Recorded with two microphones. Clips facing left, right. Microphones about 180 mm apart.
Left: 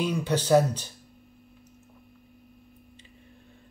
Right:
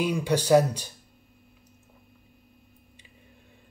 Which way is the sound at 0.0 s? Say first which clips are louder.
Right 1 dB; 10° right (ahead or behind).